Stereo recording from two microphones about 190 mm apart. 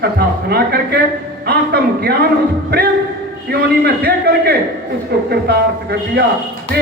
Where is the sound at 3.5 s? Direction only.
55° right (ahead or behind).